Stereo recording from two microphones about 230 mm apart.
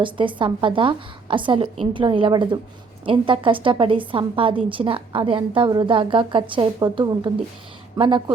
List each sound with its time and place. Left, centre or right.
0.0 s a woman's voice: right